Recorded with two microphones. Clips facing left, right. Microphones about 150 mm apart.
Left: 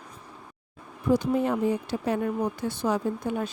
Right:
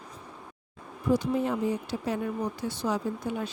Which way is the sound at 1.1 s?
60° left (ahead or behind).